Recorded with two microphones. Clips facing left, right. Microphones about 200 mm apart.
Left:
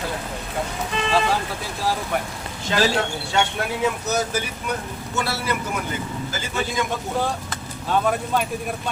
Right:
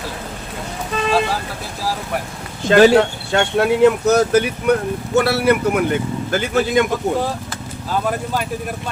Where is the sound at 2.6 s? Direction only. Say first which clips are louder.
Right 11 dB; 65° right (ahead or behind).